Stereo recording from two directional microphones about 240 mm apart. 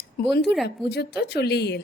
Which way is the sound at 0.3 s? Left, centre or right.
Left.